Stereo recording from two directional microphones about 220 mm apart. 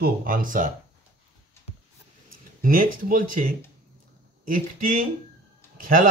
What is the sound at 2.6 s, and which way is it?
Speech, 40° right (ahead or behind).